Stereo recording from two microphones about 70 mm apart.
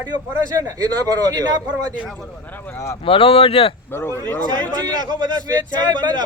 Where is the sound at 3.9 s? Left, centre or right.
Left.